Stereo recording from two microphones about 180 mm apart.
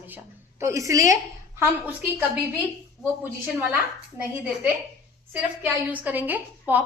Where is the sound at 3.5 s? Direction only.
10° right (ahead or behind).